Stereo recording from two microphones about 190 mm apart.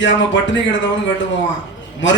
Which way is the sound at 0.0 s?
75° left (ahead or behind).